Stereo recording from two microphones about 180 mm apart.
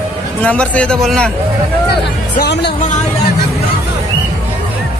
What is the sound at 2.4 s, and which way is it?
Speech, 70° left (ahead or behind).